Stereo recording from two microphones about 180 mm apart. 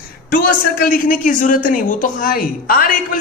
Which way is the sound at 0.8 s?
50° left (ahead or behind).